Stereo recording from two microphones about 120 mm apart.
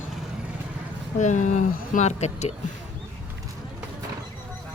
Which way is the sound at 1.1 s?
90° left.